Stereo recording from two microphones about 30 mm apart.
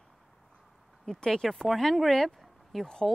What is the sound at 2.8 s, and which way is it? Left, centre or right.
Speech, left.